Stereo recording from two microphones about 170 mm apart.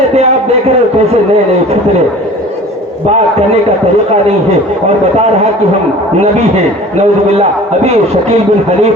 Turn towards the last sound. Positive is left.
turn(degrees=-40)  # may be behind; listen again after turning